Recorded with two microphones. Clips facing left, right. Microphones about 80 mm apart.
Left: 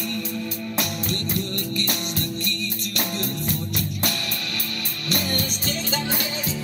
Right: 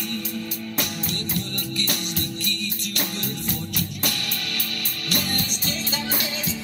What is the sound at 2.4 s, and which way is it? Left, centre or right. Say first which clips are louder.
Music: left 1 dB; right.